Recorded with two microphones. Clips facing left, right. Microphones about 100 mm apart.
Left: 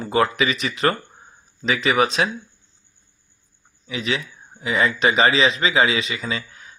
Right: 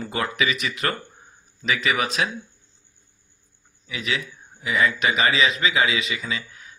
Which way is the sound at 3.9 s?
30° left (ahead or behind).